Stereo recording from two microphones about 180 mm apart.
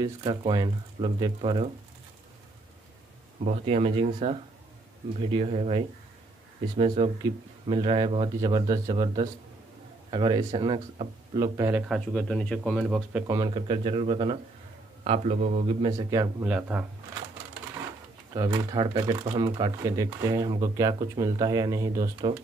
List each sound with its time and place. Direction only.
0.0 s speech: 25° right (ahead or behind)
3.4 s speech: 35° right (ahead or behind); by 13.2 s centre (ahead or behind)
13.3 s speech: 25° right (ahead or behind)
16.4 s speech: 5° right (ahead or behind)
18.3 s speech: 25° right (ahead or behind)